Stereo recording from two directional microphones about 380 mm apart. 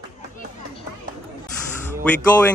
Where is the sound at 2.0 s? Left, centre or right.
Centre.